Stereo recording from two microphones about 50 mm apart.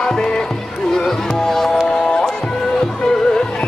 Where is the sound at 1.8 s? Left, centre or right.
Centre.